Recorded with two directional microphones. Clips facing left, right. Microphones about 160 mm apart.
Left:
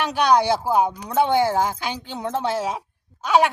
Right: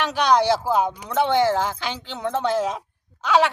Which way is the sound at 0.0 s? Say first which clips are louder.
Left 1 dB; 10° left (ahead or behind).